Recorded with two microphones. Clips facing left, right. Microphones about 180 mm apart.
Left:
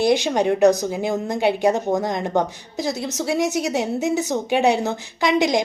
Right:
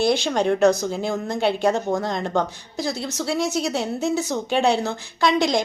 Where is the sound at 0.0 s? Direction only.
15° left (ahead or behind).